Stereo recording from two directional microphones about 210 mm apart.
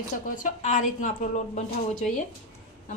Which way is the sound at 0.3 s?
40° left (ahead or behind).